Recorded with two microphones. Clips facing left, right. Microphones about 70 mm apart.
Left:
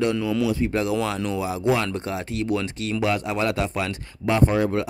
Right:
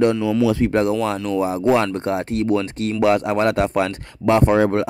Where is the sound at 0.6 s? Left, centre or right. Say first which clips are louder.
Right 5 dB; right.